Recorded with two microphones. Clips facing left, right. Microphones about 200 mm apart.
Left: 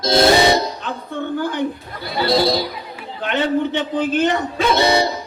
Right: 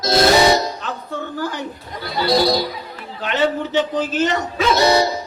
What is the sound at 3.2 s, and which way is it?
Speech, 55° left (ahead or behind).